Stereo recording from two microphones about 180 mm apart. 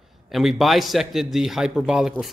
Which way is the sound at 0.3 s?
Centre (ahead or behind).